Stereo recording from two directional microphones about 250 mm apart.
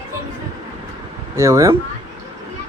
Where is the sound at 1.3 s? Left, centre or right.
Centre.